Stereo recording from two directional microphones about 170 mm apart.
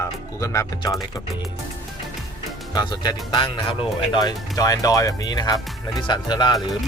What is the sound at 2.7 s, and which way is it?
Speech, 25° left (ahead or behind).